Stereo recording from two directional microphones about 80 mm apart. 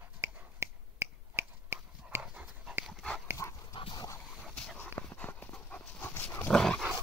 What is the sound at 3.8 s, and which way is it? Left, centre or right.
Dog, left.